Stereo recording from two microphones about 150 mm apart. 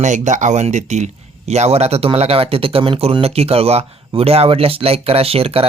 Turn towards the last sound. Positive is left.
turn(degrees=-40)  # may be behind; listen again after turning